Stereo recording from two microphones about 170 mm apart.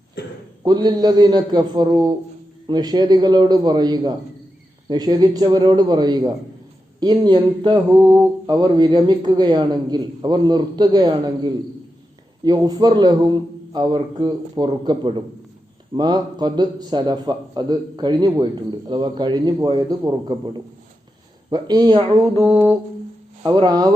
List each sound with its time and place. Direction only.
0.6 s a man's voice: 25° right (ahead or behind)
22.5 s humming: 15° right (ahead or behind)
23.4 s a man's voice: 20° right (ahead or behind)